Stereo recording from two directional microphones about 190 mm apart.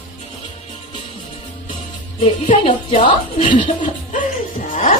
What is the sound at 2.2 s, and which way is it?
Speech, 30° left (ahead or behind).